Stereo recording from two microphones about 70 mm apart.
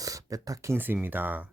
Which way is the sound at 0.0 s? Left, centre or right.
Right.